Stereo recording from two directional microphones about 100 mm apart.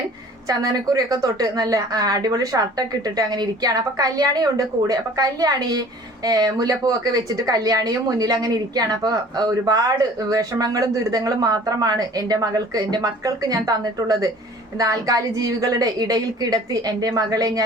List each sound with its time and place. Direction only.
0.4 s a woman's voice: 40° right (ahead or behind)